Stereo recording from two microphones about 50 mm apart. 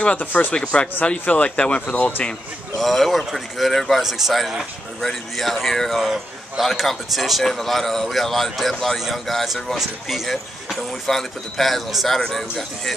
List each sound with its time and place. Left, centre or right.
0.0 s speech: left
2.8 s a man's voice: centre